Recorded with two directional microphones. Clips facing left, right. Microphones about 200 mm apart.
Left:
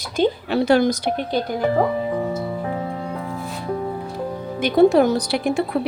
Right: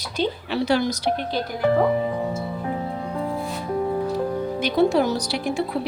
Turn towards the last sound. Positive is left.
turn(degrees=55)  # may be behind; listen again after turning